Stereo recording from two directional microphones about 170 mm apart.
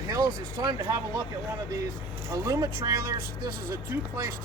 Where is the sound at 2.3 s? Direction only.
20° right (ahead or behind).